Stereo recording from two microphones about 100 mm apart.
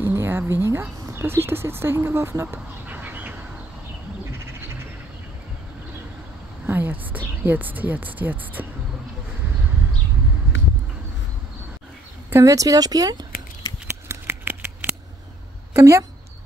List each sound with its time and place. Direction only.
0.0 s a sound: 25° right (ahead or behind)
1.1 s speech: 25° right (ahead or behind)
6.6 s a sound: 15° right (ahead or behind)
7.4 s speech: 15° right (ahead or behind)
12.3 s speech: 30° right (ahead or behind)
14.0 s scissors: 20° right (ahead or behind)
15.7 s speech: 30° right (ahead or behind)